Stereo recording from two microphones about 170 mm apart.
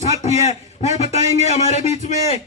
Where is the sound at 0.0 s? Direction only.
40° left (ahead or behind).